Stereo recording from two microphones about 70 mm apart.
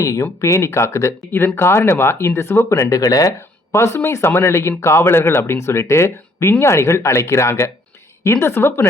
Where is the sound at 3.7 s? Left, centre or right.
Left.